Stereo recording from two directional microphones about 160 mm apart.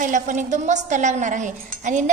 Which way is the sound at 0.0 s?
50° right (ahead or behind).